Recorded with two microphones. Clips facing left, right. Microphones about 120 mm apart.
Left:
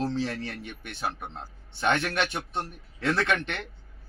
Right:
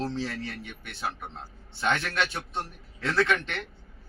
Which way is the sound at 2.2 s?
20° left (ahead or behind).